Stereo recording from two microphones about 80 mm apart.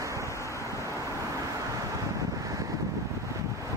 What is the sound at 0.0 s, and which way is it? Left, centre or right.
Vehicle, right.